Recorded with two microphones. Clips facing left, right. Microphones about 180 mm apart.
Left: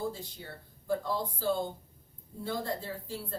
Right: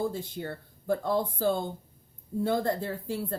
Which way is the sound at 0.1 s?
55° right (ahead or behind).